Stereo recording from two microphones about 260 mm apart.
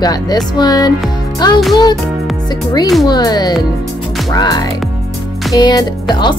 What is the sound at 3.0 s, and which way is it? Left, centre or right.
Speech, centre.